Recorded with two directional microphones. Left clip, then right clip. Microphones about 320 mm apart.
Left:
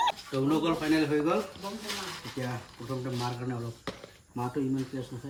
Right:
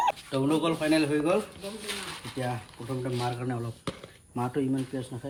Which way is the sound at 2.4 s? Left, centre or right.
Centre.